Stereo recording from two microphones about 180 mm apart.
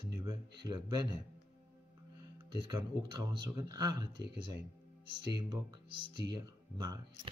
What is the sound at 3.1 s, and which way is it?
Speech, 25° right (ahead or behind).